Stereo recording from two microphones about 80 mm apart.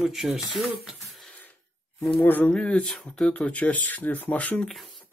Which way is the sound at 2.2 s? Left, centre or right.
Left.